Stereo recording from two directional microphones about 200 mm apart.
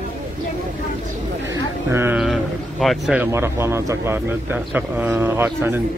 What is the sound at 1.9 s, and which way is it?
Speech, 10° right (ahead or behind).